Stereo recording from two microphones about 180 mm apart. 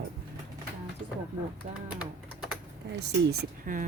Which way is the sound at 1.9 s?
5° right (ahead or behind).